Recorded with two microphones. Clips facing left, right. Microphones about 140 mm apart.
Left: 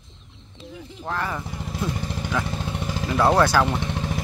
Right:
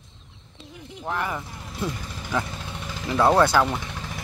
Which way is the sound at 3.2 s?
Centre (ahead or behind).